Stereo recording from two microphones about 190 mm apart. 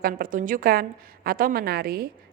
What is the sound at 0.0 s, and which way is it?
A woman's voice, 45° right (ahead or behind).